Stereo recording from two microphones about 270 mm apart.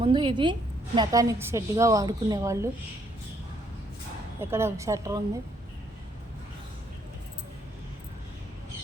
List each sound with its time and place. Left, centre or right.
0.0 s a woman's voice: centre
4.4 s a woman's voice: centre